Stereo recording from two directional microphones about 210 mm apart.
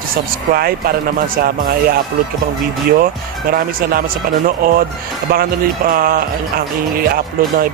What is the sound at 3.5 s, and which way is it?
Speech, 45° right (ahead or behind).